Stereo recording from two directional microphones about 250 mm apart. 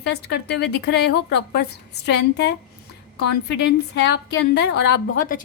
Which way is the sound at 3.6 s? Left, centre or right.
Left.